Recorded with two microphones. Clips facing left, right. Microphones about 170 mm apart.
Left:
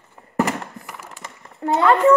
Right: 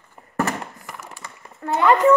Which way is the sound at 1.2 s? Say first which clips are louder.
Left 5 dB; 20° left (ahead or behind).